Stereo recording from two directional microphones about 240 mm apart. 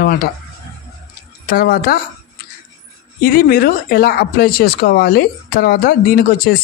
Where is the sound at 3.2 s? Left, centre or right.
Left.